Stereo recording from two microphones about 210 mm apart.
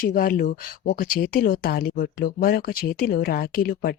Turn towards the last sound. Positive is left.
turn(degrees=45)  # may be behind; listen again after turning